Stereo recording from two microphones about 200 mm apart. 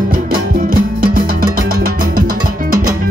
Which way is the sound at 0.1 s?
45° right (ahead or behind).